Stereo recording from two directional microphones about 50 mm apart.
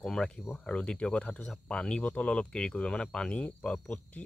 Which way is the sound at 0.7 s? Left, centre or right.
Left.